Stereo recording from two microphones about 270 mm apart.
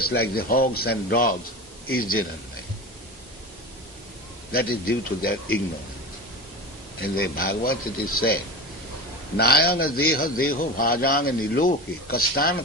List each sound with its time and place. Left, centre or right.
0.0 s a man's voice: left
4.5 s a man's voice: left
7.0 s a man's voice: left
9.4 s a man's voice: left